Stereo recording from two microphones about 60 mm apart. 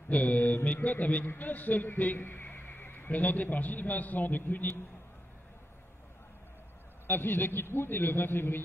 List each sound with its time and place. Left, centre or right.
0.1 s a man's voice: left
7.1 s a man's voice: left